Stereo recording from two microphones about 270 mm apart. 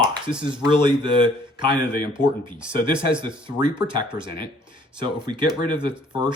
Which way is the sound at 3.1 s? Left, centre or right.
Centre.